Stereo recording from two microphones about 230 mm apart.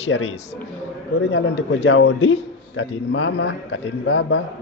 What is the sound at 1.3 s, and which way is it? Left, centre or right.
Speech, left.